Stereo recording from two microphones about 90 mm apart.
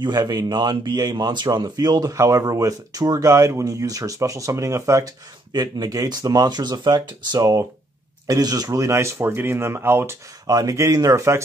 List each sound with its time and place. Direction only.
0.0 s speech: 50° right (ahead or behind); by 5.0 s 35° right (ahead or behind)
5.0 s speech: 50° right (ahead or behind); by 10.1 s 25° right (ahead or behind)
10.4 s speech: 40° right (ahead or behind)